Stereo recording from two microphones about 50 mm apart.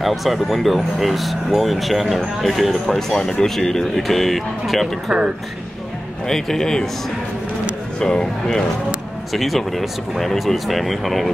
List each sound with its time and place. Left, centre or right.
0.0 s speech: centre
6.2 s speech: centre
8.0 s speech: centre
9.3 s speech: centre